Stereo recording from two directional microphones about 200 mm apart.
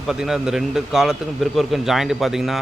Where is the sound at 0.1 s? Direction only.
5° right (ahead or behind).